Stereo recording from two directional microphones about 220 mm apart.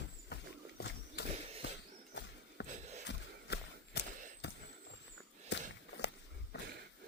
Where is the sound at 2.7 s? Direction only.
35° right (ahead or behind).